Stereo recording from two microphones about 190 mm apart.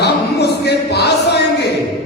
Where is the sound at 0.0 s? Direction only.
60° left (ahead or behind).